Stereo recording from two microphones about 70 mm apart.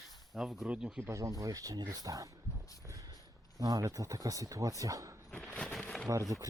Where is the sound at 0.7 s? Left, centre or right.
Centre.